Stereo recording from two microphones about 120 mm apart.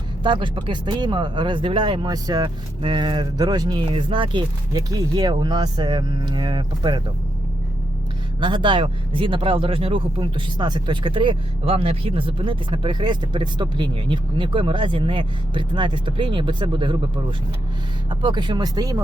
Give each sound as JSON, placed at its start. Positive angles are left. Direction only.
{"t": 0.2, "sound": "speech", "side_deg": -40}
{"t": 3.8, "sound": "speech", "side_deg": -45}
{"t": 8.4, "sound": "speech", "side_deg": -40}
{"t": 18.1, "sound": "speech", "side_deg": -40}